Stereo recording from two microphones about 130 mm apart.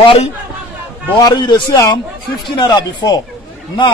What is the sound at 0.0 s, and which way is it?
A man's voice, 45° left (ahead or behind).